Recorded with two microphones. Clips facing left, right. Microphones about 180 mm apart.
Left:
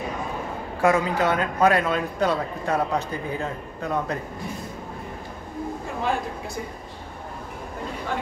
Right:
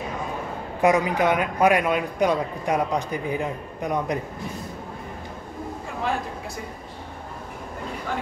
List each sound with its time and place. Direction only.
0.7 s a man's voice: 20° right (ahead or behind)